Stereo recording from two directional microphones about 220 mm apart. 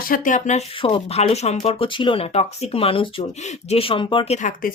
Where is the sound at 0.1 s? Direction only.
35° left (ahead or behind).